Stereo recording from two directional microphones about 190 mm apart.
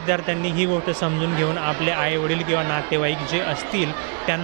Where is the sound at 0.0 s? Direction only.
15° right (ahead or behind).